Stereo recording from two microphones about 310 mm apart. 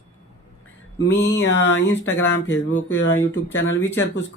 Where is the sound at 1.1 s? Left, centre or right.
Left.